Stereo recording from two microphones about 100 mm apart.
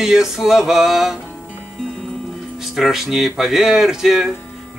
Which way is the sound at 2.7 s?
5° right (ahead or behind).